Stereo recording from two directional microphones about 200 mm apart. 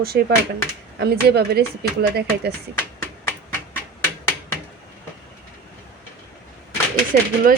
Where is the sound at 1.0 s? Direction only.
55° right (ahead or behind).